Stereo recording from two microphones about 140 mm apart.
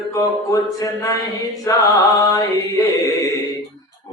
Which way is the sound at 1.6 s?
25° left (ahead or behind).